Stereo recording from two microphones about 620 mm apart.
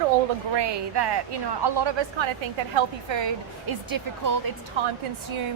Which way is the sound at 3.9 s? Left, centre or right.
Right.